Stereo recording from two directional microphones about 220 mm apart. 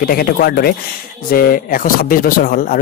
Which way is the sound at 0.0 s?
40° left (ahead or behind).